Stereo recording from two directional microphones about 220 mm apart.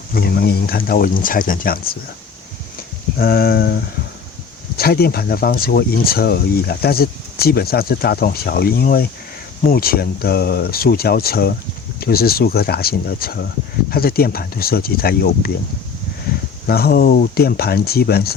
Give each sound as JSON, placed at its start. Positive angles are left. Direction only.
{"t": 0.1, "sound": "speech", "side_deg": 45}
{"t": 3.2, "sound": "speech", "side_deg": 45}
{"t": 4.8, "sound": "speech", "side_deg": 45}
{"t": 16.6, "sound": "speech", "side_deg": 45}